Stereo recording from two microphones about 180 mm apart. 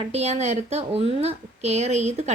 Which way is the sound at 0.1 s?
35° right (ahead or behind).